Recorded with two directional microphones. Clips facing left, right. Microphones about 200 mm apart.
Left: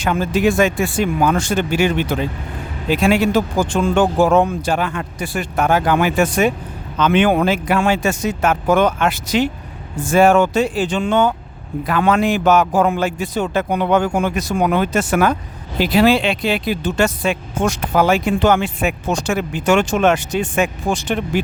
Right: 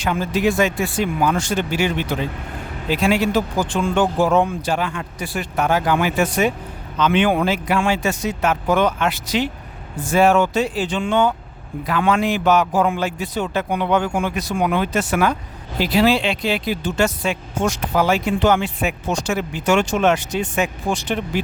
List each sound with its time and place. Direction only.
0.0 s speech: 50° left (ahead or behind)
15.8 s speech: 55° left (ahead or behind)